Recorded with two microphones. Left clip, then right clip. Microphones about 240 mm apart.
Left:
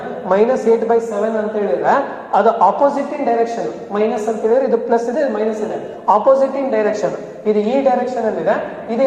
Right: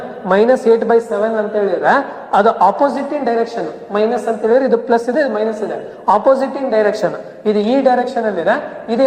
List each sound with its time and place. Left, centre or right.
0.3 s a man's voice: right